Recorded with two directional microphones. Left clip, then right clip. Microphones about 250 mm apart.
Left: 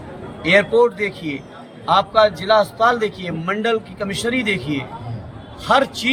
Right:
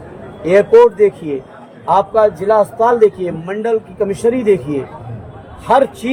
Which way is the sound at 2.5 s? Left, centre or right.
Centre.